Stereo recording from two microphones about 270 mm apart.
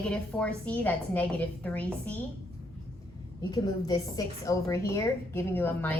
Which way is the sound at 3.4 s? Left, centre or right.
Centre.